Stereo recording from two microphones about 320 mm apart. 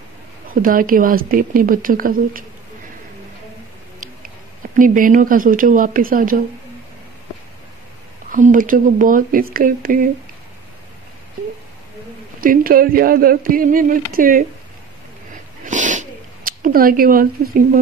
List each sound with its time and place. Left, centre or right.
0.6 s speech: right
4.7 s speech: right
8.3 s speech: right
12.4 s speech: right
15.6 s a sound: right